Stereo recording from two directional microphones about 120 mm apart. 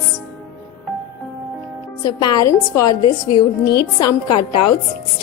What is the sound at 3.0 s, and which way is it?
Speech, 40° left (ahead or behind).